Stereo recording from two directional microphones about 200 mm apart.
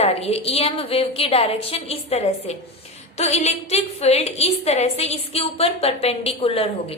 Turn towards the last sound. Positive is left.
turn(degrees=30)  # may be behind; listen again after turning